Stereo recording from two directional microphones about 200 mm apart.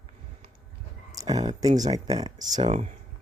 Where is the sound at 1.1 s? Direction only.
20° right (ahead or behind).